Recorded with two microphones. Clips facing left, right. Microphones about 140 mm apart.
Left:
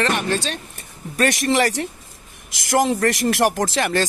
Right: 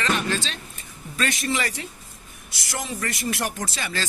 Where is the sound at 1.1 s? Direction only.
65° left (ahead or behind).